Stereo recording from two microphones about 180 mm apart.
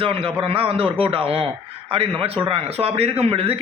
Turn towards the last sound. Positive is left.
turn(degrees=-30)  # may be behind; listen again after turning